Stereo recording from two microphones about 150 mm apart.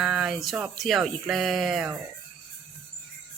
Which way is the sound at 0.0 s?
Centre (ahead or behind).